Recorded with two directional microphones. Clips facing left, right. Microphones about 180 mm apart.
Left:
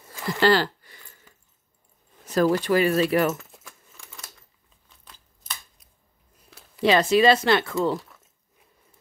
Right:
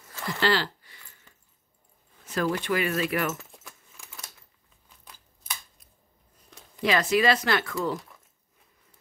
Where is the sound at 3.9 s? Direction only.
10° right (ahead or behind).